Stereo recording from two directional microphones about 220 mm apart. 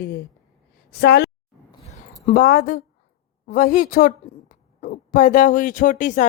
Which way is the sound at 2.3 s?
40° left (ahead or behind).